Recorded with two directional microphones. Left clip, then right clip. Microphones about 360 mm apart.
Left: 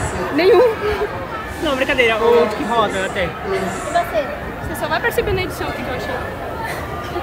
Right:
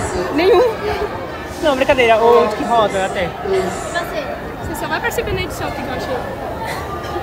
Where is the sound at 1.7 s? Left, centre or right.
Right.